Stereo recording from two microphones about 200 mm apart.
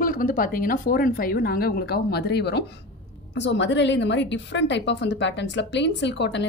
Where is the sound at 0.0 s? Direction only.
45° left (ahead or behind).